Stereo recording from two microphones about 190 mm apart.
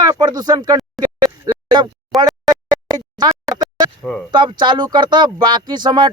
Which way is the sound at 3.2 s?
20° right (ahead or behind).